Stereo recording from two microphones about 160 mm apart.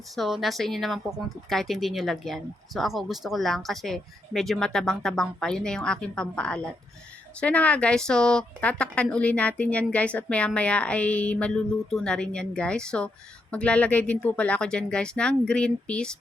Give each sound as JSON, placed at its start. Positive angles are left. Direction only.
{"t": 0.2, "sound": "a woman's voice", "side_deg": 0}